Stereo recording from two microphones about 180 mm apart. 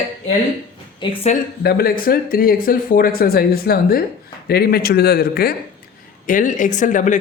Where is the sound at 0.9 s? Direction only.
35° left (ahead or behind).